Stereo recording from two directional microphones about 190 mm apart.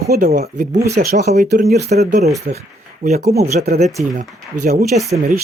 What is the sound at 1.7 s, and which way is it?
Speech, 35° right (ahead or behind).